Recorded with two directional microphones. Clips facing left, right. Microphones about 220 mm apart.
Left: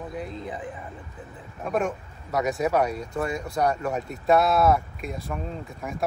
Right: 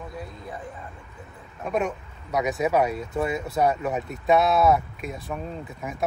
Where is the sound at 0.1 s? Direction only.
20° left (ahead or behind).